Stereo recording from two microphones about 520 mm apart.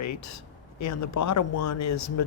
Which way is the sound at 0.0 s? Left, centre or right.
Left.